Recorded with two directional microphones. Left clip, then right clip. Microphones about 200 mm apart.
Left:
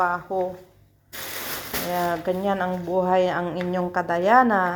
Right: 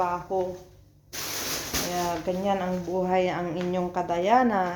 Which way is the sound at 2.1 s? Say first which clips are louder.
Left 3 dB; 35° left (ahead or behind).